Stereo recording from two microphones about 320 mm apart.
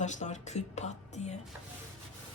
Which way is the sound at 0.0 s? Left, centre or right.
Left.